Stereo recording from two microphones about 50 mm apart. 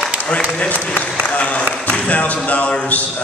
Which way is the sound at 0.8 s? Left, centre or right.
Left.